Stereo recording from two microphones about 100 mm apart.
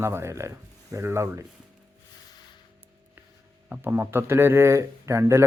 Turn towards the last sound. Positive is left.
turn(degrees=-30)  # may be behind; listen again after turning